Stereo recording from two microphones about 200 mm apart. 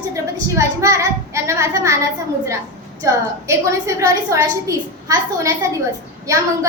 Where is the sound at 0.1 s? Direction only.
15° right (ahead or behind).